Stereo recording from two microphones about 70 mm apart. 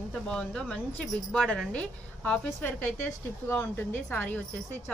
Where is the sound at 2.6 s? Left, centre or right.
Left.